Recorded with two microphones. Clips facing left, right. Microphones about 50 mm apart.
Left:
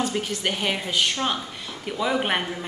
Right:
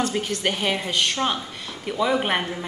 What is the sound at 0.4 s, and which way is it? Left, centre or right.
Speech, centre.